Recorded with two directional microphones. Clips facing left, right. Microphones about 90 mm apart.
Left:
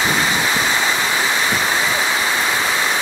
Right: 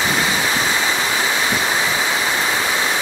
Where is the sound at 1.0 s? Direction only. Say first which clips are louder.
Left 1 dB; 5° right (ahead or behind).